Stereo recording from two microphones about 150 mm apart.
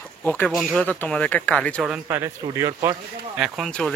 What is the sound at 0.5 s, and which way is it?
Speech, centre (ahead or behind).